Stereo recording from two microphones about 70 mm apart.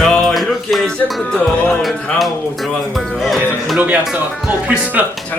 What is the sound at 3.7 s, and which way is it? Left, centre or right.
Speech, right.